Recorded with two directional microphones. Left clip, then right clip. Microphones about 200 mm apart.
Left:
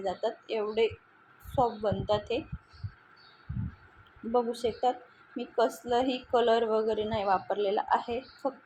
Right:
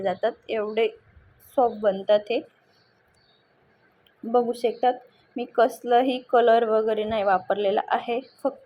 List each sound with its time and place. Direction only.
0.0 s a woman's voice: 15° right (ahead or behind)
4.3 s a woman's voice: 15° right (ahead or behind)